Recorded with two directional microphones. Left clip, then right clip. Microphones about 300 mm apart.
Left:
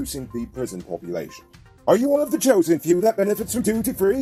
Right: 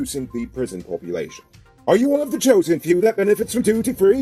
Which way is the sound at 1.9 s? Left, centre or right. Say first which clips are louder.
Right 1 dB; left.